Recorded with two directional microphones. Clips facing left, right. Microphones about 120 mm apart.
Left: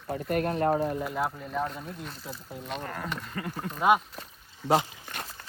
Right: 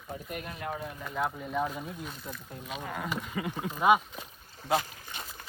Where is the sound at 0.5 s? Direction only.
40° left (ahead or behind).